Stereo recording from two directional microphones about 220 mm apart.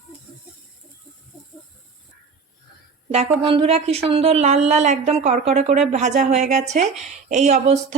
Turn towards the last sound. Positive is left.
turn(degrees=-30)  # may be behind; listen again after turning